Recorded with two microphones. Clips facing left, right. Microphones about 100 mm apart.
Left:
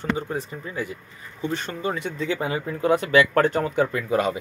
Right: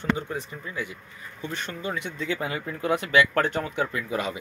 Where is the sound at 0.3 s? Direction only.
35° left (ahead or behind).